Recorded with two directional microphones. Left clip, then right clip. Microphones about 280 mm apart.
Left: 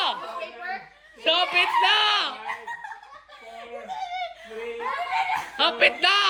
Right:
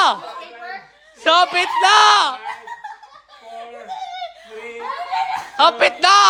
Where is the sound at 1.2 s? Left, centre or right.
Right.